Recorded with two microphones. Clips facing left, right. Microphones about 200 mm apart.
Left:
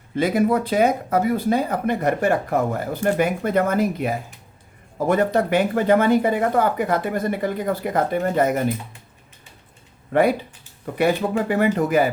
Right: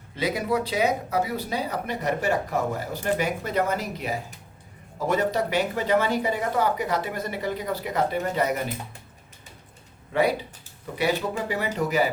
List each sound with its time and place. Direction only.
0.2 s speech: 50° left (ahead or behind)
10.1 s speech: 55° left (ahead or behind)